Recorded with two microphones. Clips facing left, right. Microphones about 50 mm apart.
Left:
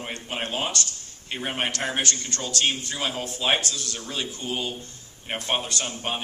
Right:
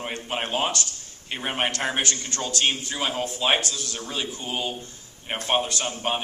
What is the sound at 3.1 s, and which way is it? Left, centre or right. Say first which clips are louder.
Speech: right 3 dB; right.